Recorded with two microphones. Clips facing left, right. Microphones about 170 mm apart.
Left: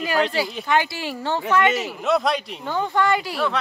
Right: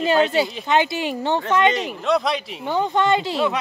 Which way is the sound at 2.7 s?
20° right (ahead or behind).